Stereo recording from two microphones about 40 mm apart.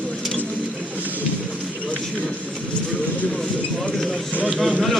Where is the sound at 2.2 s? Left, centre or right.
Left.